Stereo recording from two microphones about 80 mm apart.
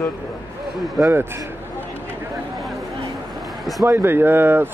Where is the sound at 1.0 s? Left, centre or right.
Right.